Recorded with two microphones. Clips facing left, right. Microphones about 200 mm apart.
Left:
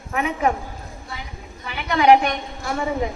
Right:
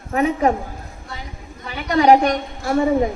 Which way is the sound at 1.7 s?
35° right (ahead or behind).